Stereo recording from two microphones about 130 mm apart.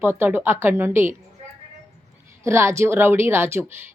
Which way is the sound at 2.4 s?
20° right (ahead or behind).